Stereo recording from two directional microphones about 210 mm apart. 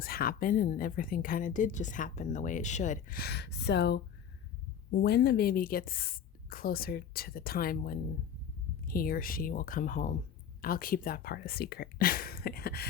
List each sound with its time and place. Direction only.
0.0 s a woman's voice: 45° left (ahead or behind)